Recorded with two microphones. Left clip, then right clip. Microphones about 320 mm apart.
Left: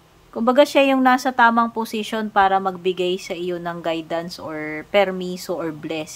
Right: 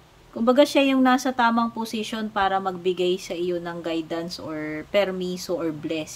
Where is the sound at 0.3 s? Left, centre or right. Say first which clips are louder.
Left 3 dB; centre.